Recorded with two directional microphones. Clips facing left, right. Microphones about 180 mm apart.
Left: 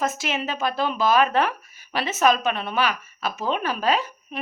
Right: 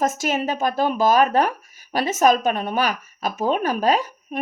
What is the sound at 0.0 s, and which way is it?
A woman's voice, 45° right (ahead or behind).